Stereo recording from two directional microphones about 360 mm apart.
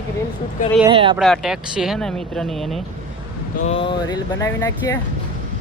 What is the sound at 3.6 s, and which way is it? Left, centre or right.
Speech, centre.